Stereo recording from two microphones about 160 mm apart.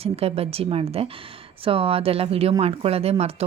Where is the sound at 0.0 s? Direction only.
40° right (ahead or behind).